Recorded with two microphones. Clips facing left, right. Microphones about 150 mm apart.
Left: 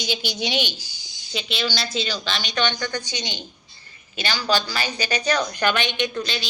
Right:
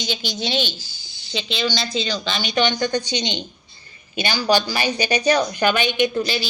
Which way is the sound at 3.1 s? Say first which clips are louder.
Right 7 dB; 20° right (ahead or behind).